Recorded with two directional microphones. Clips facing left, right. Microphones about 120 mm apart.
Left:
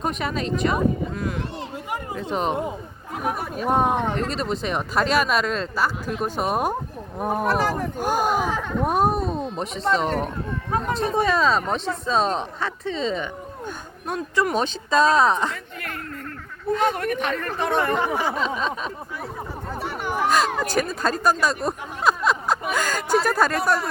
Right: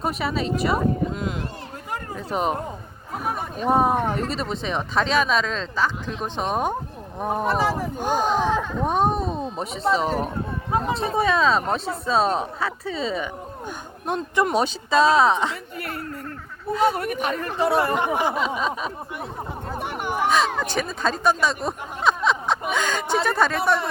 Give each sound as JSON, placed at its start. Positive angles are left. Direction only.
{"t": 0.0, "sound": "speech", "side_deg": -5}
{"t": 1.1, "sound": "speech", "side_deg": -20}
{"t": 2.1, "sound": "speech", "side_deg": -5}
{"t": 14.1, "sound": "speech", "side_deg": -20}
{"t": 14.5, "sound": "speech", "side_deg": -5}
{"t": 16.7, "sound": "speech", "side_deg": -5}
{"t": 18.0, "sound": "speech", "side_deg": -15}
{"t": 18.3, "sound": "speech", "side_deg": -5}
{"t": 19.7, "sound": "a sound", "side_deg": -15}
{"t": 20.2, "sound": "speech", "side_deg": 0}